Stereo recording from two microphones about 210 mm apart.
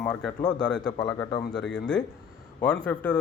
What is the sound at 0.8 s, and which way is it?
Speech, 20° left (ahead or behind).